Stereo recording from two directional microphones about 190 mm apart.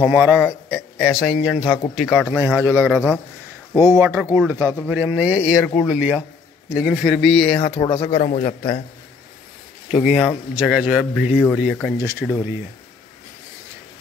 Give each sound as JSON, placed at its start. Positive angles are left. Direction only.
{"t": 0.1, "sound": "a man's voice", "side_deg": -5}
{"t": 2.4, "sound": "speech", "side_deg": -10}
{"t": 7.5, "sound": "a man's voice", "side_deg": 35}
{"t": 8.1, "sound": "a man's voice", "side_deg": 40}
{"t": 9.9, "sound": "speech", "side_deg": 0}
{"t": 12.0, "sound": "speech", "side_deg": -15}